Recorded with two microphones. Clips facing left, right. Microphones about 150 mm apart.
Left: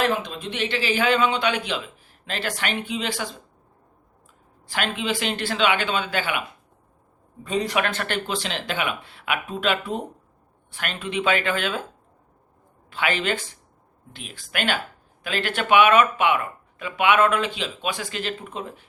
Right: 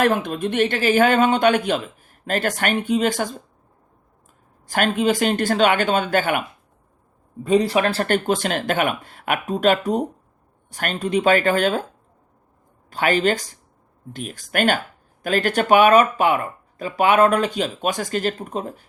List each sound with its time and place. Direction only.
0.0 s speech: 50° right (ahead or behind)
4.6 s speech: 45° right (ahead or behind)
7.4 s speech: 35° right (ahead or behind)
12.9 s speech: 40° right (ahead or behind)